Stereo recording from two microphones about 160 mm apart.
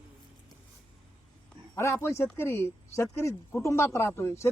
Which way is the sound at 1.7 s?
15° left (ahead or behind).